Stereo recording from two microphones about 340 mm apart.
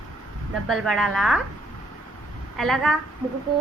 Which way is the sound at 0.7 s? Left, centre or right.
Centre.